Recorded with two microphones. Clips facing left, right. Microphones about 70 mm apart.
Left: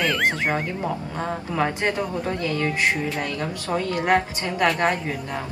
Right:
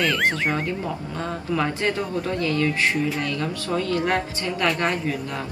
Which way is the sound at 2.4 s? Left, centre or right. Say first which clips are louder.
Right 1 dB; left.